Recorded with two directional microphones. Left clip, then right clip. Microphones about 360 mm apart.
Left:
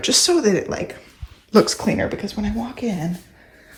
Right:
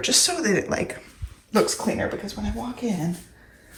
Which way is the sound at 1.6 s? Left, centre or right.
Centre.